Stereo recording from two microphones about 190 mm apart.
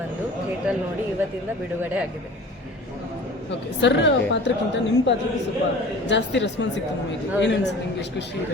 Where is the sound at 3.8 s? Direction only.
70° left (ahead or behind).